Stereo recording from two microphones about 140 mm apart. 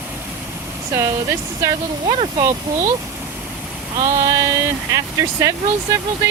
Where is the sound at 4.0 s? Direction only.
25° right (ahead or behind).